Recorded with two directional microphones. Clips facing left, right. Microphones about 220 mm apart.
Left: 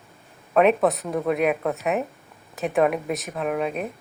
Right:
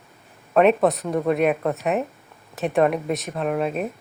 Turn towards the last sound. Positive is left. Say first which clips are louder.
# right 2 dB
turn(degrees=0)  # may be behind; listen again after turning